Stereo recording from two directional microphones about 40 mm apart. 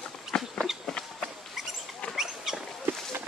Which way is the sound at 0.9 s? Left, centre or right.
Centre.